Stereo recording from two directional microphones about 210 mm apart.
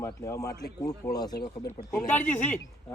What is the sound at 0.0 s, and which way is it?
A man's voice, 15° left (ahead or behind).